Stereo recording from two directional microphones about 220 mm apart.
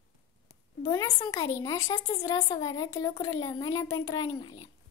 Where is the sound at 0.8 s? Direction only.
15° left (ahead or behind).